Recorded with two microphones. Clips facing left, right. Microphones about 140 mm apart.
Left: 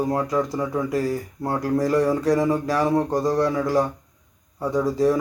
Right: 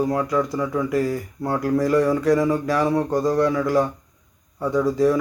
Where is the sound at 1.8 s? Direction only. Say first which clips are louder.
Right 1 dB; 40° left (ahead or behind).